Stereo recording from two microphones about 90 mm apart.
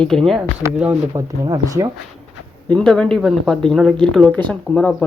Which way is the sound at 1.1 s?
40° right (ahead or behind).